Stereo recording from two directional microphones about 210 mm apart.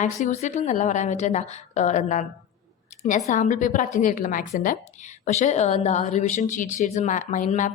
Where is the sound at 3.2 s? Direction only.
35° left (ahead or behind).